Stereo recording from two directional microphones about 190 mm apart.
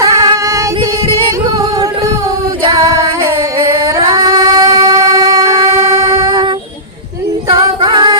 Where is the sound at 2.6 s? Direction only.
15° right (ahead or behind).